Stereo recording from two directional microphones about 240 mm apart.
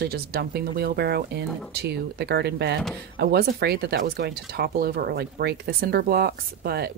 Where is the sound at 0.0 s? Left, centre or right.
Right.